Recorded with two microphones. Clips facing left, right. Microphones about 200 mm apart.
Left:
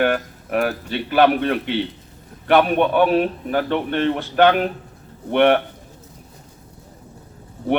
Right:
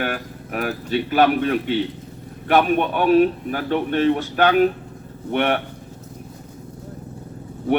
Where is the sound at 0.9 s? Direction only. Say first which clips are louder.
Right 1 dB; 45° right (ahead or behind).